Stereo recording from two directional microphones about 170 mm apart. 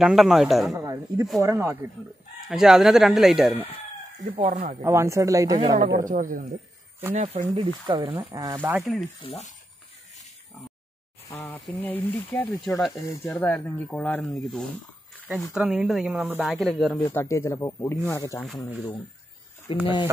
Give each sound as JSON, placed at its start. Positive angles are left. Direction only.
{"t": 0.0, "sound": "speech", "side_deg": 0}
{"t": 0.7, "sound": "a sound", "side_deg": -20}
{"t": 1.4, "sound": "speech", "side_deg": -15}
{"t": 2.4, "sound": "speech", "side_deg": -5}
{"t": 4.5, "sound": "speech", "side_deg": -50}
{"t": 4.8, "sound": "speech", "side_deg": -15}
{"t": 5.9, "sound": "speech", "side_deg": -50}
{"t": 7.2, "sound": "speech", "side_deg": -35}
{"t": 8.2, "sound": "speech", "side_deg": -15}
{"t": 9.2, "sound": "speech", "side_deg": 35}
{"t": 11.4, "sound": "speech", "side_deg": 5}
{"t": 12.9, "sound": "speech", "side_deg": 15}
{"t": 17.0, "sound": "speech", "side_deg": 15}
{"t": 19.7, "sound": "speech", "side_deg": 30}